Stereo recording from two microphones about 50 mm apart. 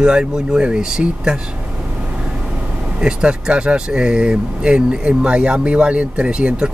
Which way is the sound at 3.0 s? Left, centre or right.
Right.